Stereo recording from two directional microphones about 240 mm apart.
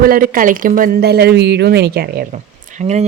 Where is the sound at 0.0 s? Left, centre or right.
Right.